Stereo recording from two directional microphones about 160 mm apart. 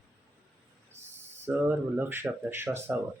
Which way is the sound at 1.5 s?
15° right (ahead or behind).